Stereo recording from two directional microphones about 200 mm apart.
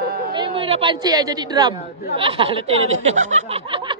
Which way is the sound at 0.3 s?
25° right (ahead or behind).